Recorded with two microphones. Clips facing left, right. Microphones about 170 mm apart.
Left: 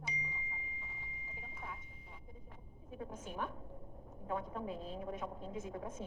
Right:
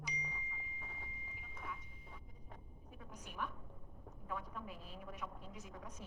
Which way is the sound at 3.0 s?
25° left (ahead or behind).